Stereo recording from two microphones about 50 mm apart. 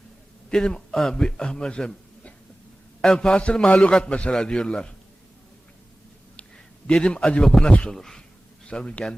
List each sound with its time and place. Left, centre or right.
0.5 s a man's voice: centre
3.0 s a man's voice: centre
6.8 s a man's voice: left
7.4 s a man's voice: centre
7.7 s a man's voice: left
7.9 s a man's voice: centre
8.6 s a man's voice: centre